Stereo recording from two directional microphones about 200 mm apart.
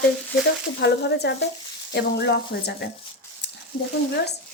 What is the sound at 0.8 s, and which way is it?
Speech, 60° left (ahead or behind).